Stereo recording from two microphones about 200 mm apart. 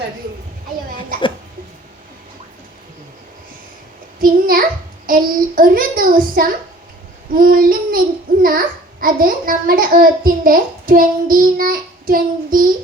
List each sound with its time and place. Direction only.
4.2 s child singing: 45° right (ahead or behind)
5.0 s a child's voice: 45° right (ahead or behind)